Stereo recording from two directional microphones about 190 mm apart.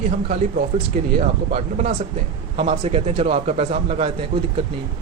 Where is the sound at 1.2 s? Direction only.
40° right (ahead or behind).